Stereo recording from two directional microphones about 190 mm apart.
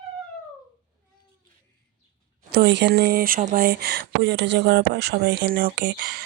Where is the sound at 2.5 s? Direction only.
60° right (ahead or behind).